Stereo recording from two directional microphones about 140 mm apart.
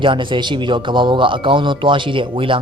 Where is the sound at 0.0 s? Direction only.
35° right (ahead or behind).